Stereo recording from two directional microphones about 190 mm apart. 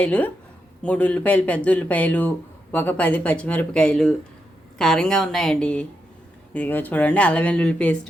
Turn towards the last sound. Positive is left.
turn(degrees=5)  # may be behind; listen again after turning